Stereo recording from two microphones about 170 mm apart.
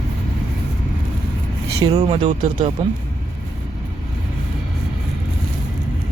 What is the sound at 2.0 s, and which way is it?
Speech, 40° right (ahead or behind).